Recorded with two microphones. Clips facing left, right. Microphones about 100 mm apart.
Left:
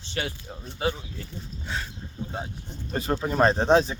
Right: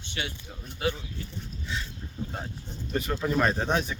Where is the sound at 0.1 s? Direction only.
40° left (ahead or behind).